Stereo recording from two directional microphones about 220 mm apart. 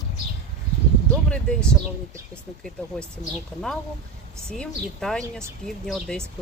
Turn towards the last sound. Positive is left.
turn(degrees=0)  # may be behind; listen again after turning